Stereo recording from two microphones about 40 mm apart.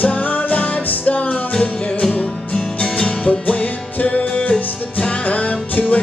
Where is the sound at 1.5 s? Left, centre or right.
Left.